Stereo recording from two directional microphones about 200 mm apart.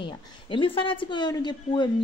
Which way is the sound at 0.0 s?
25° left (ahead or behind).